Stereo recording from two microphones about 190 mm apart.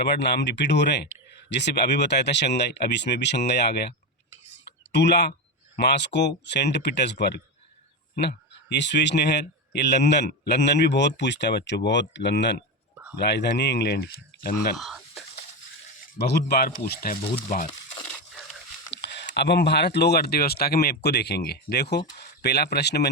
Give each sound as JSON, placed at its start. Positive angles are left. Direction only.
{"t": 0.0, "sound": "speech", "side_deg": 60}
{"t": 4.9, "sound": "speech", "side_deg": 65}
{"t": 14.8, "sound": "a sound", "side_deg": 0}
{"t": 16.1, "sound": "stir", "side_deg": 60}
{"t": 19.0, "sound": "speech", "side_deg": 65}